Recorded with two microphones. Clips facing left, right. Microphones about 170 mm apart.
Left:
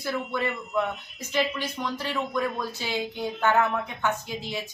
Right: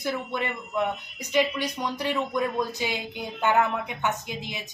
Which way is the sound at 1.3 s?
15° right (ahead or behind).